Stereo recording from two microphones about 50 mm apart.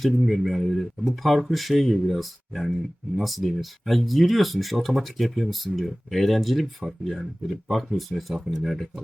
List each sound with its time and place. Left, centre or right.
0.0 s speech: centre